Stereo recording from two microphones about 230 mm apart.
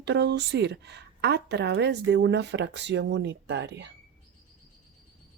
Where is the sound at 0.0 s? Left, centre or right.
Right.